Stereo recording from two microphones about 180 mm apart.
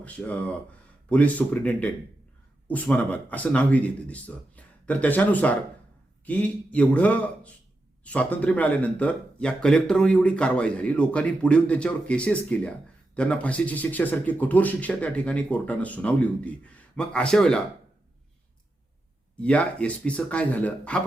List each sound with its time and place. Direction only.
0.0 s speech: 10° left (ahead or behind)
19.4 s speech: 5° left (ahead or behind)